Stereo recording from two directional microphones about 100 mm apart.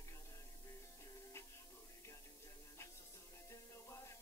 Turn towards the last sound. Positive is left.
turn(degrees=30)  # may be behind; listen again after turning